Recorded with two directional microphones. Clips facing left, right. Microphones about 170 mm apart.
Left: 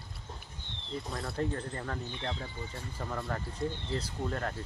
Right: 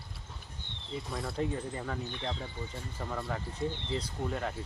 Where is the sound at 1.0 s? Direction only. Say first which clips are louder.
Right 1 dB; centre (ahead or behind).